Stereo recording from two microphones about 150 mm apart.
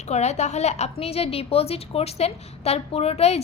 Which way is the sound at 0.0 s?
50° left (ahead or behind).